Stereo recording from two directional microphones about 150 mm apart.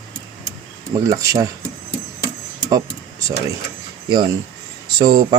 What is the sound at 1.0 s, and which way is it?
Speech, 20° right (ahead or behind).